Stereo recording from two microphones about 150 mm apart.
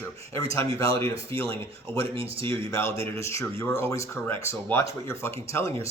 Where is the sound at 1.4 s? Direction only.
40° right (ahead or behind).